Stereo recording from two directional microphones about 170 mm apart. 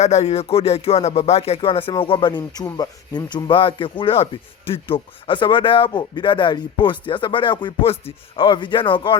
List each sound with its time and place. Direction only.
0.0 s speech: 40° left (ahead or behind)